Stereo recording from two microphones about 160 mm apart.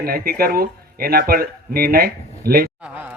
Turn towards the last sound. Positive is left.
turn(degrees=-10)  # may be behind; listen again after turning